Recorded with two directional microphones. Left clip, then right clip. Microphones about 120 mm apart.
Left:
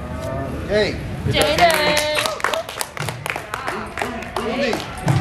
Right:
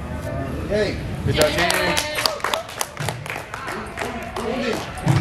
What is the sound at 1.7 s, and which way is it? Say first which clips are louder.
Music: left 4 dB; 15° left (ahead or behind).